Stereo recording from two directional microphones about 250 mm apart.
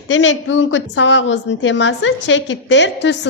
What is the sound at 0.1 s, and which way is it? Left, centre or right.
A woman's voice, left.